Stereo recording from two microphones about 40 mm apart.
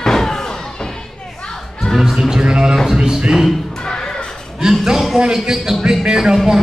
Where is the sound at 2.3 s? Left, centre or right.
Centre.